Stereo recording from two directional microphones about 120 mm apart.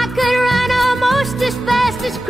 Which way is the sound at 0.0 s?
Centre (ahead or behind).